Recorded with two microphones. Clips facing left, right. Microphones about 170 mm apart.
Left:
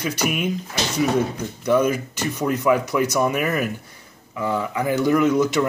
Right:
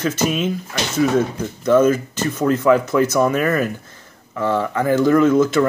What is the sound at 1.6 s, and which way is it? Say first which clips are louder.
Speech: right 5 dB; 10° left (ahead or behind).